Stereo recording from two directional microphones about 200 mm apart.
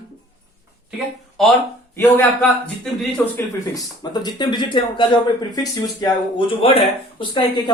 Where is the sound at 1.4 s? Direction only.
Centre (ahead or behind).